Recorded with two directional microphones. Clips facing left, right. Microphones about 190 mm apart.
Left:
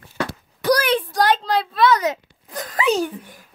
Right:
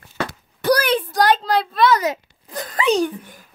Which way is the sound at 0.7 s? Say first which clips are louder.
Right 1 dB; centre (ahead or behind).